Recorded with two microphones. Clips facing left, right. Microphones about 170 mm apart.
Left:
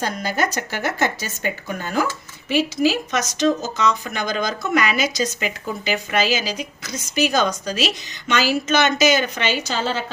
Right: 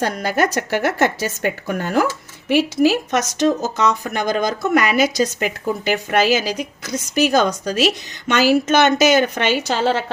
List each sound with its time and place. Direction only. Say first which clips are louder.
0.0 s a woman's voice: right 4 dB; 65° right (ahead or behind)